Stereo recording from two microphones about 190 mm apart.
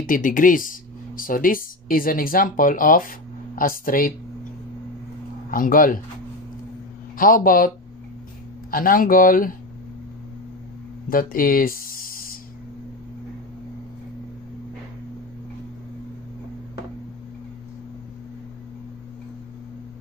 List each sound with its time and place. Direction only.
0.0 s speech: 45° left (ahead or behind)
5.5 s speech: 45° left (ahead or behind)
7.2 s speech: 45° left (ahead or behind)
11.1 s a sound: 45° left (ahead or behind)